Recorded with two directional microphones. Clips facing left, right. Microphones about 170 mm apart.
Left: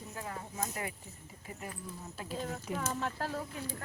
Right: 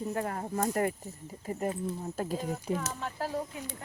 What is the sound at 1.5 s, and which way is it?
Speech, 40° right (ahead or behind).